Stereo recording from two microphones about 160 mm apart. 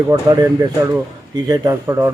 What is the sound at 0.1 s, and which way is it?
A man's voice, 20° right (ahead or behind).